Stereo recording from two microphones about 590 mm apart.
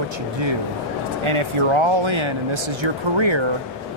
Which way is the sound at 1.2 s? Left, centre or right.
Right.